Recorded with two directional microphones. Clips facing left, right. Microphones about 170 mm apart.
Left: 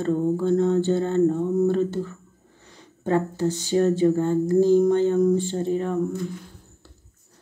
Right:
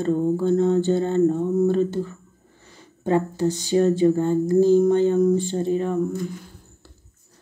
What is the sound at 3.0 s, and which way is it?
Speech, 15° right (ahead or behind).